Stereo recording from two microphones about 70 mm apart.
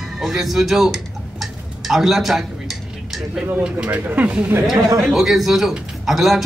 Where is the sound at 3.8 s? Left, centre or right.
Right.